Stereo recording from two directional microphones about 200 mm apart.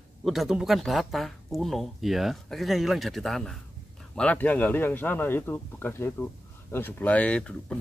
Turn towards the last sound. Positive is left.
turn(degrees=5)  # may be behind; listen again after turning